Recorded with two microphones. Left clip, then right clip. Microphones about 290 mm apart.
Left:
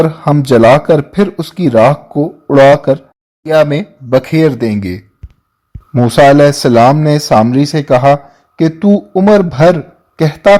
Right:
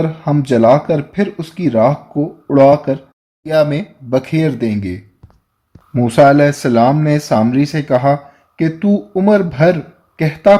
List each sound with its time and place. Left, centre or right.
0.0 s speech: left